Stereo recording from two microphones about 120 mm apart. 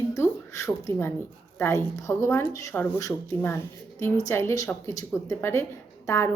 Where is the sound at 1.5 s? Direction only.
25° left (ahead or behind).